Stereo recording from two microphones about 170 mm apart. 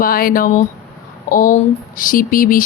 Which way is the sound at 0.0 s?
55° left (ahead or behind).